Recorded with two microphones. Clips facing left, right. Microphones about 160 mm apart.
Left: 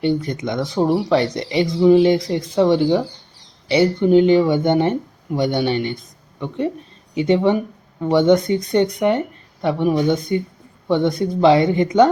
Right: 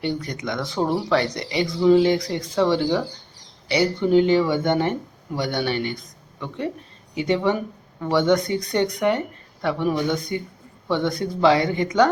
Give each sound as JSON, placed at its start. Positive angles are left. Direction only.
{"t": 0.0, "sound": "speech", "side_deg": 25}